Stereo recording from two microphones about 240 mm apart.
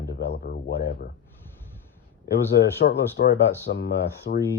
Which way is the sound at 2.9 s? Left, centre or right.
Left.